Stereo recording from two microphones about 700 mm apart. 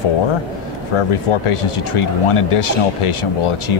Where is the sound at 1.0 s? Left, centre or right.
Left.